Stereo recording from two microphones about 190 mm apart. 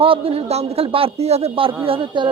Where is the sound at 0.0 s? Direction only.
30° right (ahead or behind).